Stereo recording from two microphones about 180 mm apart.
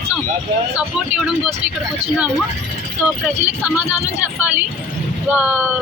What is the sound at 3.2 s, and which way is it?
Speech, 10° right (ahead or behind).